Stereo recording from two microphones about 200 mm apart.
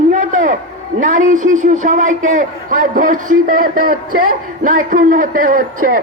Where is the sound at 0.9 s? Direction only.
40° right (ahead or behind).